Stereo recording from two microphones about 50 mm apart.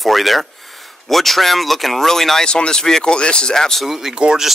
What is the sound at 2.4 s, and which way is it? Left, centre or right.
Speech, centre.